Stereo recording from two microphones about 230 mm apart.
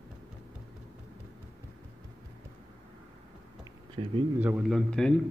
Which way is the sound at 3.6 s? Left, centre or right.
Right.